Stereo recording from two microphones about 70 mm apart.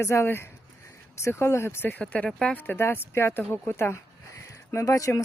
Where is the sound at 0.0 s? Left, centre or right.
Left.